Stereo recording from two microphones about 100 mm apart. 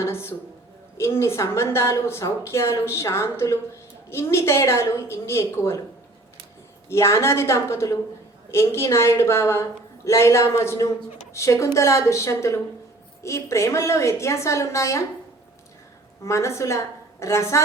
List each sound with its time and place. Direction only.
0.0 s a woman's voice: 25° left (ahead or behind)
6.8 s a woman's voice: 25° left (ahead or behind)
16.2 s a woman's voice: 30° left (ahead or behind)